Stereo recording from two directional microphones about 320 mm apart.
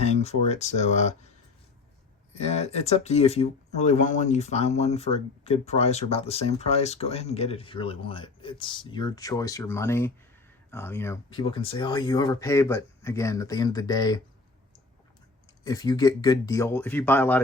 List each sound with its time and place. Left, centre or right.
0.0 s speech: centre
2.3 s speech: centre
15.6 s speech: centre